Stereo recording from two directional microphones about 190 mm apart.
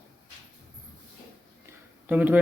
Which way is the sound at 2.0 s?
10° right (ahead or behind).